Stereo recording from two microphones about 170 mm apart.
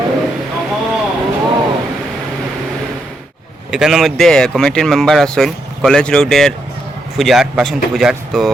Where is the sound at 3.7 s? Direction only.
Centre (ahead or behind).